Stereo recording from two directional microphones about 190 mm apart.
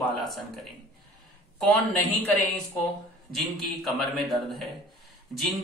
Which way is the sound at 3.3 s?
Centre (ahead or behind).